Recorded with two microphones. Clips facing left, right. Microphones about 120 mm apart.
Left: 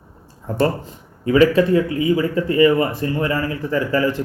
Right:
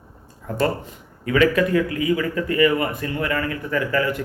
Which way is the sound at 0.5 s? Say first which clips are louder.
Left 3 dB; 30° left (ahead or behind).